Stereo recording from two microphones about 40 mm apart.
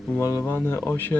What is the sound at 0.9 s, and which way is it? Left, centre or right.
Speech, left.